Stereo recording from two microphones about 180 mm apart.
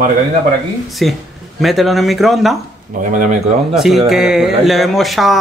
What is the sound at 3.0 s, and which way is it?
Speech, 45° right (ahead or behind).